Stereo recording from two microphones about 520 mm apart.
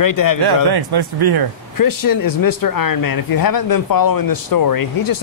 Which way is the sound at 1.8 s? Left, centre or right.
Left.